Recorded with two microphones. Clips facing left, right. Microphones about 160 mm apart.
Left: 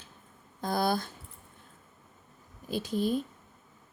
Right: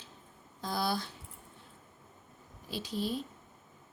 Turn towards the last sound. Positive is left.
turn(degrees=50)  # may be behind; listen again after turning